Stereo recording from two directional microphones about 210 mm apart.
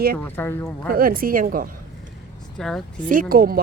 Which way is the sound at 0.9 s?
45° right (ahead or behind).